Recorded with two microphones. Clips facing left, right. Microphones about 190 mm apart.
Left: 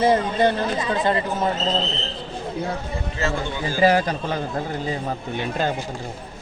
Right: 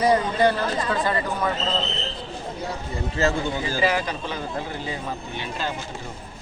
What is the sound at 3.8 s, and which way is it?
Speech, 45° left (ahead or behind).